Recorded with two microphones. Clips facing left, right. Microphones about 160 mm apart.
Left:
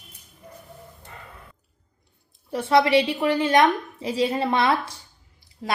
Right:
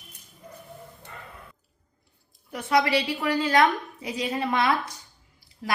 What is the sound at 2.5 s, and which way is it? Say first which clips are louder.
A woman's voice: left 5 dB; 30° left (ahead or behind).